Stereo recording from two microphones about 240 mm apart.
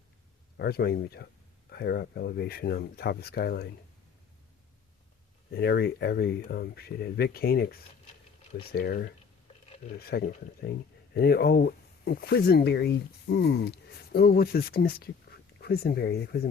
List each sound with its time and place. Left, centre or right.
0.5 s speech: left
5.5 s speech: left